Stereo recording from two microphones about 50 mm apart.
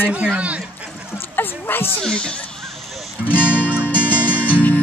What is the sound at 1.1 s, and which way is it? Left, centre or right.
Dog, left.